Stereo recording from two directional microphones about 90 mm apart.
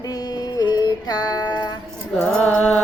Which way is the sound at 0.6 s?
50° left (ahead or behind).